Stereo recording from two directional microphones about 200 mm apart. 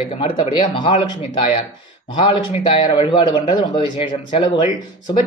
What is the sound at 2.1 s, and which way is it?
Speech, 25° left (ahead or behind).